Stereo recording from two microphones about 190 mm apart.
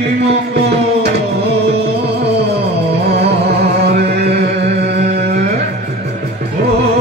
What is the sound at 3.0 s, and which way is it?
Music, 60° right (ahead or behind).